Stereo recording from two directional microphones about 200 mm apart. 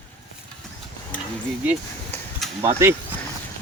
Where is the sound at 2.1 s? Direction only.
10° left (ahead or behind).